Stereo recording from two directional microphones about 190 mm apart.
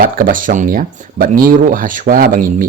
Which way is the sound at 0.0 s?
45° right (ahead or behind).